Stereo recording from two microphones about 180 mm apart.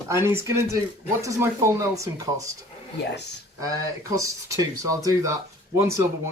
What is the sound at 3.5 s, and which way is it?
Speech, 20° right (ahead or behind).